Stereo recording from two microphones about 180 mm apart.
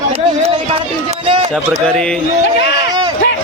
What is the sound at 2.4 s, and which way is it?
Speech, 70° left (ahead or behind).